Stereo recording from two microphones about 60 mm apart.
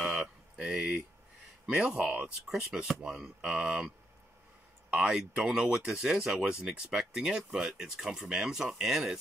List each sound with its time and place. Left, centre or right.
0.0 s a sound: centre
0.6 s speech: centre
4.9 s speech: centre